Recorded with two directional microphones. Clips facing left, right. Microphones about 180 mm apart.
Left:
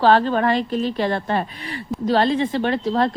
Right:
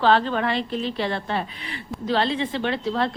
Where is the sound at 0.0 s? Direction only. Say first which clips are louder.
Left 4 dB; 45° left (ahead or behind).